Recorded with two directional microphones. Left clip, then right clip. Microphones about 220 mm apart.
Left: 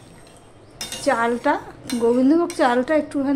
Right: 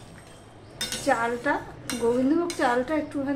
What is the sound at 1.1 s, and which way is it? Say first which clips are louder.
A woman's voice: left 5 dB; 45° left (ahead or behind).